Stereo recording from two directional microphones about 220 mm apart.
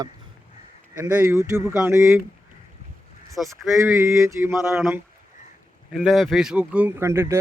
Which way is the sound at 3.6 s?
Centre (ahead or behind).